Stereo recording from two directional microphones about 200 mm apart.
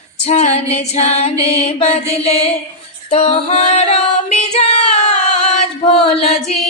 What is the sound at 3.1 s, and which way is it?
Music, 30° left (ahead or behind).